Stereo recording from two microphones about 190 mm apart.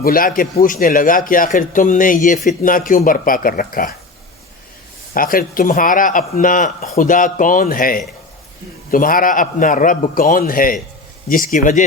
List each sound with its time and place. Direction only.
0.0 s speech: 50° left (ahead or behind)
5.1 s speech: 50° left (ahead or behind)